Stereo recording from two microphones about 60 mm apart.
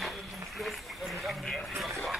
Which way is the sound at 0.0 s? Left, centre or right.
Centre.